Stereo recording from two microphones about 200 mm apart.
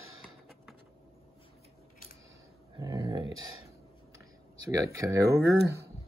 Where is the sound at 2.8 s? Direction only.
20° right (ahead or behind).